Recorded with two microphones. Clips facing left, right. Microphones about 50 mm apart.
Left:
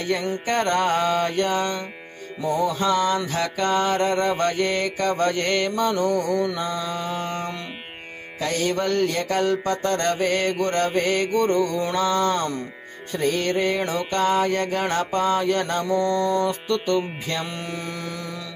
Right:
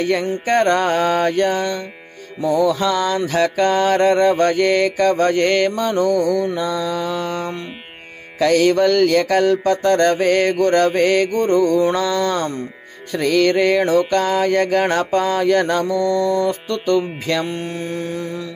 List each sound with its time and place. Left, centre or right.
0.5 s music: right
2.5 s mantra: right
8.4 s mantra: right
10.5 s music: right
11.0 s mantra: right
11.3 s music: right
13.1 s mantra: right
14.9 s mantra: right
16.0 s mantra: left
16.4 s mantra: right
17.6 s mantra: right